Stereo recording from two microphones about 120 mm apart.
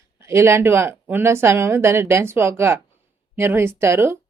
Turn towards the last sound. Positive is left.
turn(degrees=-20)  # may be behind; listen again after turning